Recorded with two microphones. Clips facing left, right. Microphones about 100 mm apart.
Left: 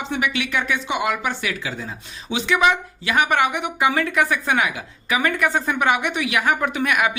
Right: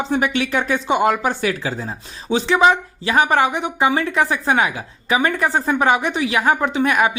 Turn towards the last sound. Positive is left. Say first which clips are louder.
# right 4 dB
turn(degrees=-30)  # may be behind; listen again after turning